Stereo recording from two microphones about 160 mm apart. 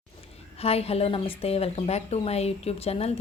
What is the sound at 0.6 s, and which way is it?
A woman's voice, 40° left (ahead or behind).